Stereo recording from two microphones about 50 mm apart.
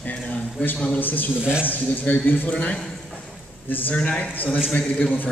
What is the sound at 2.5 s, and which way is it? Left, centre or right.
Speech, left.